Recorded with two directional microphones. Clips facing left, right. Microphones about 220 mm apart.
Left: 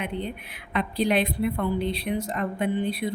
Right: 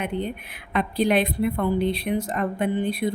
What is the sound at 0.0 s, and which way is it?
Speech, 50° right (ahead or behind).